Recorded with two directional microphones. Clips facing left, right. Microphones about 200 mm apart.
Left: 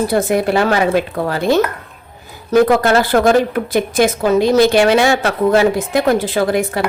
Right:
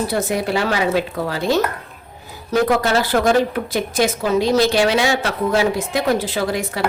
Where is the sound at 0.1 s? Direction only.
55° left (ahead or behind).